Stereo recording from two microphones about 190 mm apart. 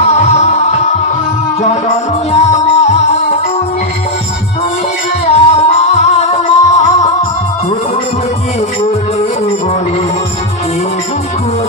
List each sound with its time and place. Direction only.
0.0 s music: 35° left (ahead or behind)
2.3 s music: 35° left (ahead or behind)
5.2 s music: 35° left (ahead or behind)